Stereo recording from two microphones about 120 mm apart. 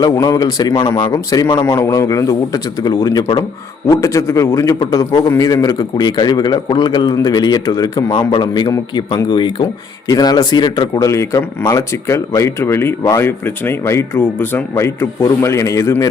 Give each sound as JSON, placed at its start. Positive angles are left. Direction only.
{"t": 0.0, "sound": "a man's voice", "side_deg": 30}